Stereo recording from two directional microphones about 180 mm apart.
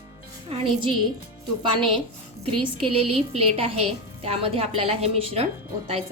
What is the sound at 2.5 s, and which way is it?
A woman's voice, 30° right (ahead or behind).